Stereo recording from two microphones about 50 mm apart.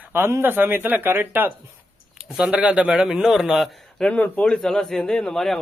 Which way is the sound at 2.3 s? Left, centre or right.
Centre.